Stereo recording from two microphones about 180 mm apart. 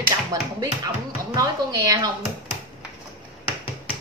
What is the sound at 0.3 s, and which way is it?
Speech, 20° right (ahead or behind).